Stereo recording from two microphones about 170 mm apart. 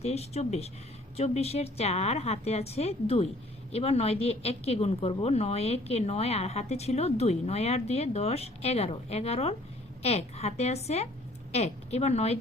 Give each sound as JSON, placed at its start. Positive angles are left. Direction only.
{"t": 0.0, "sound": "speech", "side_deg": 40}